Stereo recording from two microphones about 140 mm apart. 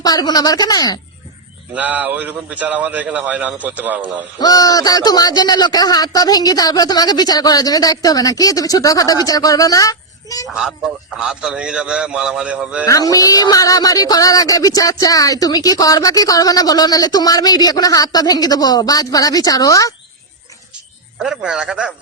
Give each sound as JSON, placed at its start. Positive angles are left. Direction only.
{"t": 0.0, "sound": "speech", "side_deg": 25}
{"t": 1.7, "sound": "a man's voice", "side_deg": -10}
{"t": 4.4, "sound": "speech", "side_deg": 25}
{"t": 10.5, "sound": "a man's voice", "side_deg": -5}
{"t": 12.9, "sound": "speech", "side_deg": 25}
{"t": 21.2, "sound": "a man's voice", "side_deg": -5}